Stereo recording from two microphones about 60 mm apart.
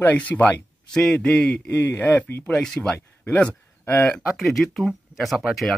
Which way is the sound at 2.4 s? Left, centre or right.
Centre.